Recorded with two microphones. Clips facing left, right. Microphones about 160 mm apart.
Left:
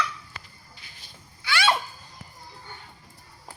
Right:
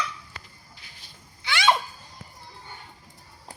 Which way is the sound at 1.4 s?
20° right (ahead or behind).